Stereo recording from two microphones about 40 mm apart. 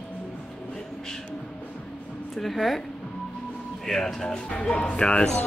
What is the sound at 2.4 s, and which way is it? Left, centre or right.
Speech, centre.